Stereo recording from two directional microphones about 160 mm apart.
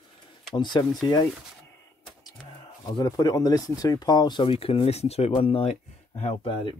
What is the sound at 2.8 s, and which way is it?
Speech, 25° left (ahead or behind).